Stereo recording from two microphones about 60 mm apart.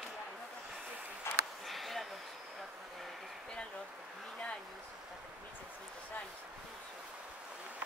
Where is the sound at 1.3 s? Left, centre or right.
Left.